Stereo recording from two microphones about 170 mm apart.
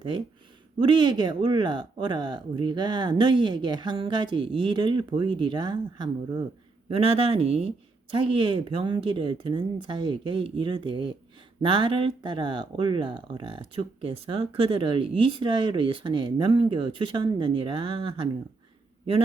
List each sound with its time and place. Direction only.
0.8 s speech: 30° right (ahead or behind)